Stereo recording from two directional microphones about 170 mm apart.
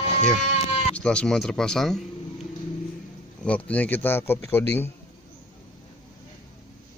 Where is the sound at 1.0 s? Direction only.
5° left (ahead or behind).